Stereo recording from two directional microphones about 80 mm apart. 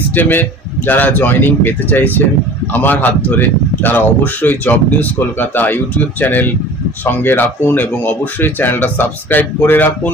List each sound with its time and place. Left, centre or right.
0.1 s speech: left